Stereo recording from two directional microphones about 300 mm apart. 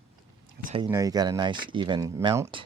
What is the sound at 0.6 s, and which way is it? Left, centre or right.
Speech, centre.